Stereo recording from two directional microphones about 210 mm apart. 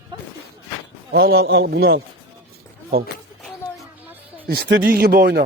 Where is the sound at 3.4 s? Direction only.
5° right (ahead or behind).